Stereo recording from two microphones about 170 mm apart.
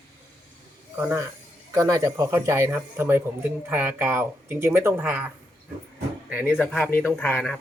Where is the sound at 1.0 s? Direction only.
15° right (ahead or behind).